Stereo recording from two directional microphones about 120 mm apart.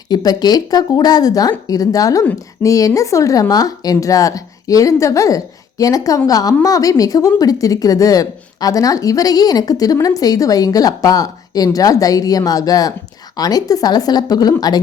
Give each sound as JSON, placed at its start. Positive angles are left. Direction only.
{"t": 0.1, "sound": "speech", "side_deg": 35}